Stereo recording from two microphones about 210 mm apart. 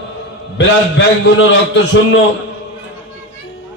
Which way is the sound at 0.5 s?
60° left (ahead or behind).